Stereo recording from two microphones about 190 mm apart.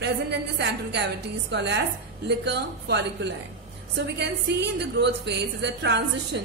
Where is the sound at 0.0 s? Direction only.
65° right (ahead or behind).